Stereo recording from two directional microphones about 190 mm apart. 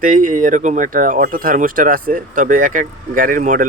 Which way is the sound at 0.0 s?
45° right (ahead or behind).